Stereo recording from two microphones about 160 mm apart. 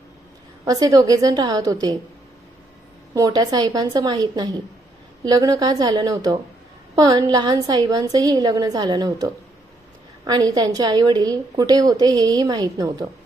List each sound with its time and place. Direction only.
0.6 s a woman's voice: 25° right (ahead or behind)
3.2 s a woman's voice: 25° right (ahead or behind)